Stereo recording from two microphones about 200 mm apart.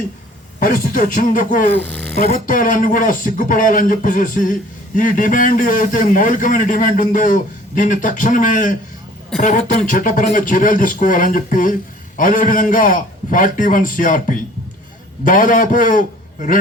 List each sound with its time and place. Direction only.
0.6 s speech: 45° left (ahead or behind)
1.7 s speech: 5° left (ahead or behind)
2.2 s a man's voice: 45° left (ahead or behind)